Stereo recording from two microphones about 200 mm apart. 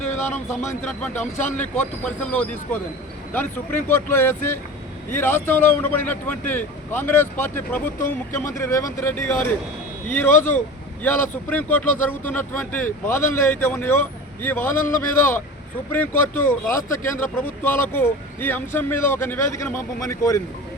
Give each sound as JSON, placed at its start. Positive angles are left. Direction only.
{"t": 0.0, "sound": "a sound", "side_deg": 35}
{"t": 0.7, "sound": "a man's voice", "side_deg": 5}
{"t": 17.0, "sound": "speech", "side_deg": 40}
{"t": 17.6, "sound": "a man's voice", "side_deg": 10}